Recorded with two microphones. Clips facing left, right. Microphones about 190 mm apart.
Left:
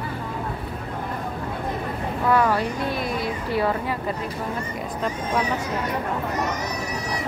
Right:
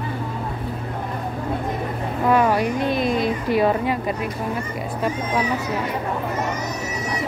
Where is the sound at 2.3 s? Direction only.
15° right (ahead or behind).